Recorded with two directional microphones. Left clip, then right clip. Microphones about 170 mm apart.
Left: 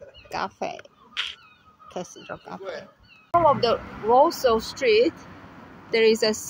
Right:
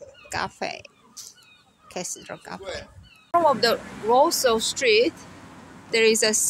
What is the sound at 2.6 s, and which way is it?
Speech, 45° right (ahead or behind).